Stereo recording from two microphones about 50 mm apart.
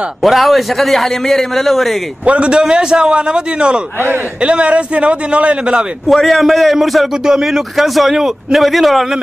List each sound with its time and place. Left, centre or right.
0.2 s a man's voice: centre
2.2 s a man's voice: right
6.0 s a man's voice: centre